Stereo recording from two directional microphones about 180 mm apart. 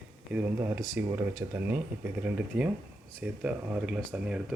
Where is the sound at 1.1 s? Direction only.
15° right (ahead or behind).